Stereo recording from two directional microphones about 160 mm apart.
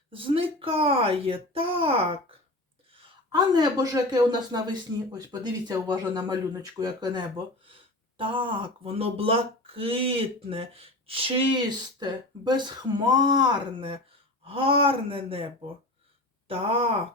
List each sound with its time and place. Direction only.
0.1 s speech: 35° right (ahead or behind)
3.3 s speech: 25° right (ahead or behind)
16.5 s speech: 35° right (ahead or behind)